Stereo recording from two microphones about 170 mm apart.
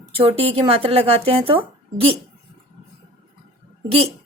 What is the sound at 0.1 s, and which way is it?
Speech, 35° right (ahead or behind).